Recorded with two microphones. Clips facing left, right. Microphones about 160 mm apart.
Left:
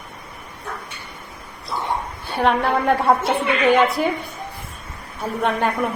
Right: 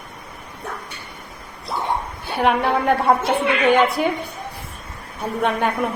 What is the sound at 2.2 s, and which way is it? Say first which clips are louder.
A woman's voice: even; centre (ahead or behind).